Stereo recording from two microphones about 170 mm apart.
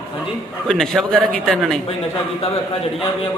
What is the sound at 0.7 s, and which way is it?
A man's voice, 5° left (ahead or behind).